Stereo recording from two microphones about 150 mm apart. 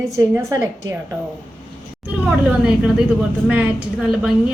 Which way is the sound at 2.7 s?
5° right (ahead or behind).